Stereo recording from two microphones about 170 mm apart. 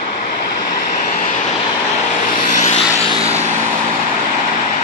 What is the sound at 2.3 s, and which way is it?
Vehicle, 45° left (ahead or behind).